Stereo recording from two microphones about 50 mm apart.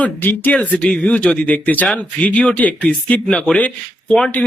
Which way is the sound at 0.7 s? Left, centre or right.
Centre.